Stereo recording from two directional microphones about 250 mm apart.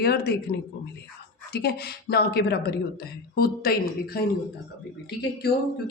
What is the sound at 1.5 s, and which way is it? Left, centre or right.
Speech, left.